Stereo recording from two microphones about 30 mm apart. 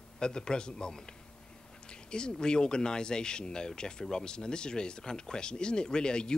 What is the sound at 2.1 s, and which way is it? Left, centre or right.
Speech, left.